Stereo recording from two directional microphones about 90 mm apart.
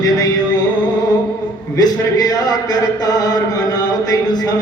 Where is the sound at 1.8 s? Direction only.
45° left (ahead or behind).